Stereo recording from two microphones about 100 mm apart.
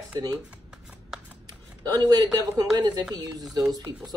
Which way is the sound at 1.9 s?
40° right (ahead or behind).